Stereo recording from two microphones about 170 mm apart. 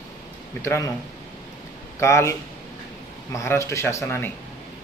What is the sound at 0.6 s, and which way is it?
Speech, 15° left (ahead or behind).